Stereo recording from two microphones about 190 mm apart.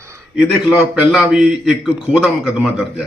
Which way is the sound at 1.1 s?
5° right (ahead or behind).